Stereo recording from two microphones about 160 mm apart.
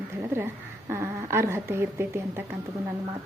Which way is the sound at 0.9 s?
15° right (ahead or behind).